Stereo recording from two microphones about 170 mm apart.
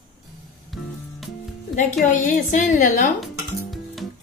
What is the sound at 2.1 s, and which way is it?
A woman's voice, 50° left (ahead or behind).